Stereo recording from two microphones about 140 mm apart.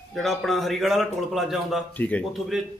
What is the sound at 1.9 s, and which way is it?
Speech, 10° left (ahead or behind).